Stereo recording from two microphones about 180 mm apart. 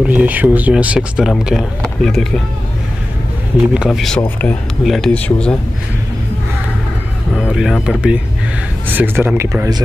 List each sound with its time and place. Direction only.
0.1 s speech: 10° right (ahead or behind)
3.7 s speech: 5° right (ahead or behind)
7.3 s speech: centre (ahead or behind); by 9.8 s 20° right (ahead or behind)